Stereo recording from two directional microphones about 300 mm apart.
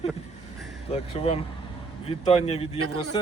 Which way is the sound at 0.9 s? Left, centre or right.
Centre.